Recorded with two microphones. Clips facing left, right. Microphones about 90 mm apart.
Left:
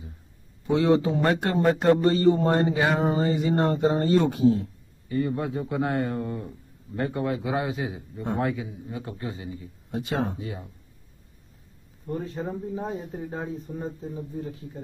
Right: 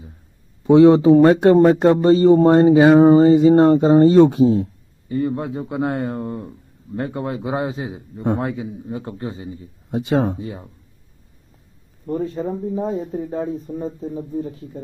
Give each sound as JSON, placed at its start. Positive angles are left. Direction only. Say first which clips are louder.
{"t": 0.7, "sound": "a man's voice", "louder": "right 11 dB", "side_deg": -25}